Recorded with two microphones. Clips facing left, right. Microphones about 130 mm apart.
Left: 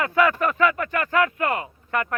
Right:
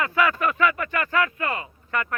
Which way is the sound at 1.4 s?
60° left (ahead or behind).